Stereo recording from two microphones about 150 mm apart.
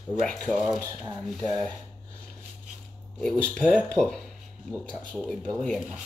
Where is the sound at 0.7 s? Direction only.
25° right (ahead or behind).